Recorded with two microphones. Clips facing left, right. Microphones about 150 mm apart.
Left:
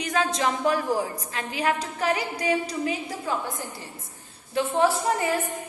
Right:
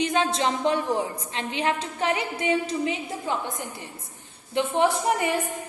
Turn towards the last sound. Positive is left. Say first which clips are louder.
# even
turn(degrees=-20)  # may be behind; listen again after turning